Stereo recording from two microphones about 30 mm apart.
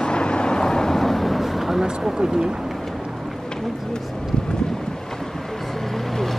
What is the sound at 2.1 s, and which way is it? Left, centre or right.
Speech, right.